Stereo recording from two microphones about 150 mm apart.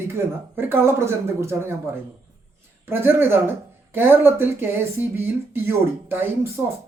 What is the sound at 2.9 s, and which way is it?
Speech, 15° right (ahead or behind).